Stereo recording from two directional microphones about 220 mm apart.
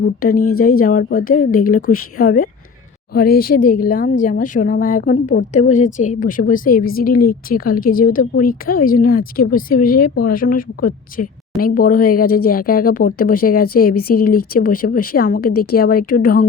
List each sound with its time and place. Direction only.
0.0 s speech: 45° left (ahead or behind)